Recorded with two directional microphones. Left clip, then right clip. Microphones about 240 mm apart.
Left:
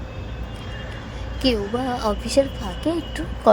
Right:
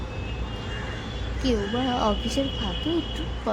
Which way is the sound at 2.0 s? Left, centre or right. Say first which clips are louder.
Left 5 dB; left.